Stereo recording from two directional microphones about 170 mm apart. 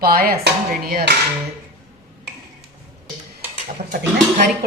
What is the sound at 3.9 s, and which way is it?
Speech, 55° right (ahead or behind).